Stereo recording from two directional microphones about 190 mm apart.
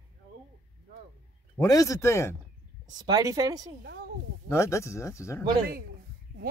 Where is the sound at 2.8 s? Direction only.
20° right (ahead or behind).